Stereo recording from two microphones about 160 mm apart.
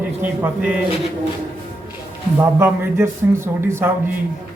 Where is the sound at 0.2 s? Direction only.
10° right (ahead or behind).